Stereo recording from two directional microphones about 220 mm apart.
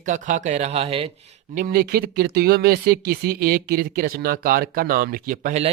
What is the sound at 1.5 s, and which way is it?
Speech, 40° right (ahead or behind).